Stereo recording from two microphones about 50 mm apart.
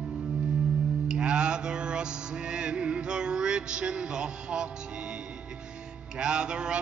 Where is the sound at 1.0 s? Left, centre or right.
Centre.